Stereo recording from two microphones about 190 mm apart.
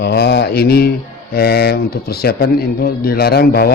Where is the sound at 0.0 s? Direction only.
60° left (ahead or behind).